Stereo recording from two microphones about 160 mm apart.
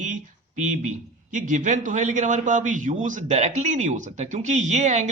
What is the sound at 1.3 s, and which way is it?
A man's voice, 55° right (ahead or behind).